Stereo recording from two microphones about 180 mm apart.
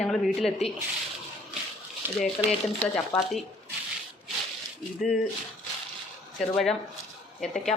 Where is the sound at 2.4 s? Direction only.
15° left (ahead or behind).